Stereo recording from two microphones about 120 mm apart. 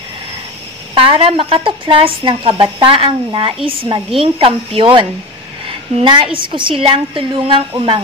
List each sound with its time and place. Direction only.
0.9 s a woman's voice: 50° right (ahead or behind)